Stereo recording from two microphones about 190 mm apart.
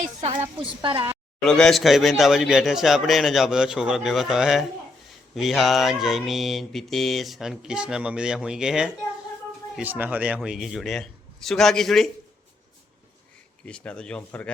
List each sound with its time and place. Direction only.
0.0 s a woman's voice: 40° right (ahead or behind)
0.8 s a woman's voice: 25° right (ahead or behind)
1.5 s mantra: 5° left (ahead or behind)
13.7 s mantra: 5° left (ahead or behind)